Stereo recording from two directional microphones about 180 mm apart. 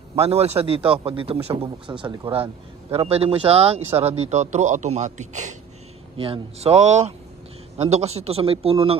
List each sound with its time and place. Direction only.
0.1 s a man's voice: 35° right (ahead or behind)
6.1 s a man's voice: 30° right (ahead or behind)